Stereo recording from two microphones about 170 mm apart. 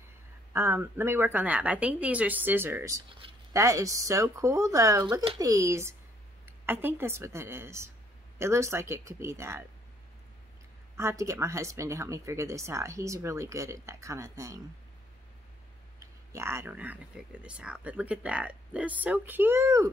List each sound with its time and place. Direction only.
0.5 s speech: 15° right (ahead or behind)
11.0 s speech: 15° right (ahead or behind)
16.0 s speech: 15° right (ahead or behind)